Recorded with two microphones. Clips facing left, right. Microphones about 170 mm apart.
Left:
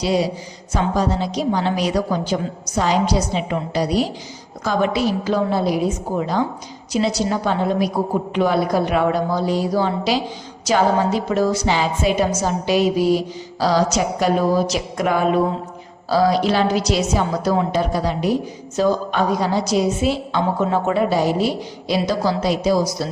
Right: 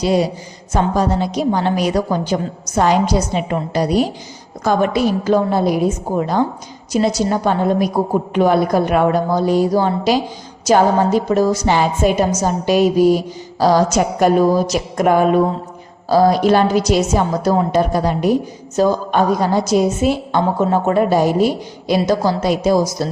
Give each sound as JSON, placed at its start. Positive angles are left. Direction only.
{"t": 0.0, "sound": "a woman's voice", "side_deg": -50}